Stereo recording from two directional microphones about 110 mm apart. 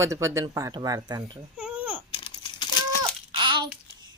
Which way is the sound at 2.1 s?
50° left (ahead or behind).